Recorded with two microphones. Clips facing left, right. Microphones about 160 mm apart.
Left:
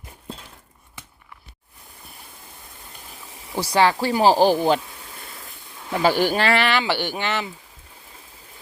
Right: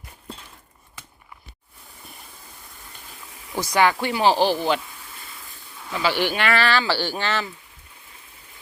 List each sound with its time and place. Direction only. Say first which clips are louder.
3.6 s speech: left 1 dB; 30° left (ahead or behind)
5.9 s speech: left 4 dB; 50° left (ahead or behind); by 7.5 s 15° left (ahead or behind)